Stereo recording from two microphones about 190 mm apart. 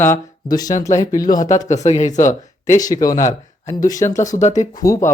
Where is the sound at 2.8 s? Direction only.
20° left (ahead or behind).